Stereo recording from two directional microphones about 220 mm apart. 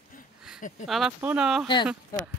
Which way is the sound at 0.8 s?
Centre (ahead or behind).